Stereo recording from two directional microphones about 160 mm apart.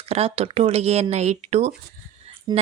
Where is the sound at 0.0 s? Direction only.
35° right (ahead or behind).